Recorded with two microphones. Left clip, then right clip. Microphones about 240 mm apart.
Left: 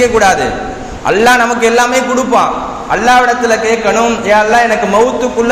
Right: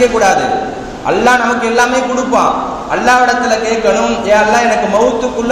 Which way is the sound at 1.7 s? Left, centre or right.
Left.